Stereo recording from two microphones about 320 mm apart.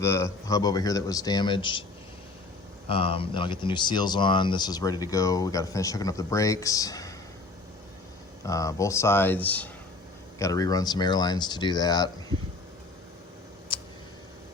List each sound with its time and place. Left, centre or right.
0.0 s speech: centre
2.9 s speech: centre
8.4 s speech: centre
13.7 s tick: centre